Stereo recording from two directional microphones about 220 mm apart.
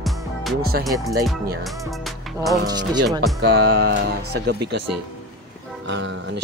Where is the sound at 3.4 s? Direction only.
45° right (ahead or behind).